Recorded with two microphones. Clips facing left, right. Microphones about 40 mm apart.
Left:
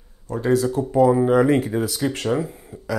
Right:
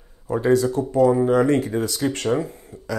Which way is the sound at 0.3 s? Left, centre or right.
Centre.